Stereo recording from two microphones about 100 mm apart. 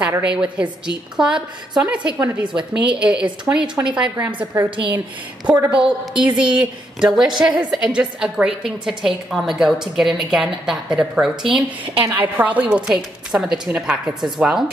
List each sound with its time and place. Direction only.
0.2 s a woman's voice: 10° right (ahead or behind)
4.6 s a woman's voice: 55° right (ahead or behind)
5.5 s a woman's voice: 15° right (ahead or behind)
11.8 s a woman's voice: 60° right (ahead or behind)
12.2 s a woman's voice: 15° right (ahead or behind)